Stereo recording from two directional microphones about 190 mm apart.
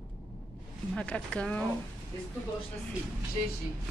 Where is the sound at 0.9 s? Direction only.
5° left (ahead or behind).